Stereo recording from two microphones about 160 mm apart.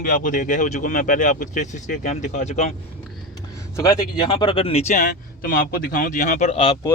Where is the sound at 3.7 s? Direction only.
25° left (ahead or behind); by 6.5 s 55° left (ahead or behind).